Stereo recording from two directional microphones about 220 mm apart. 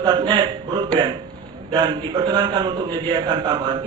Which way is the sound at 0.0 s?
20° right (ahead or behind).